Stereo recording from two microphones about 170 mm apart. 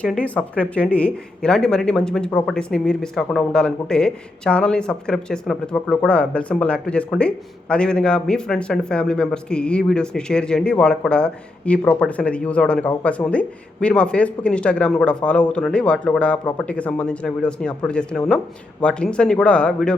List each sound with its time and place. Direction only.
0.0 s speech: 5° left (ahead or behind)